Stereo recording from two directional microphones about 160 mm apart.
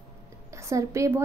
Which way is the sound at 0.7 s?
20° right (ahead or behind).